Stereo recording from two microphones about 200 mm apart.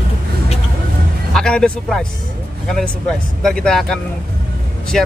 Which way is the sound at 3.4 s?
Centre (ahead or behind).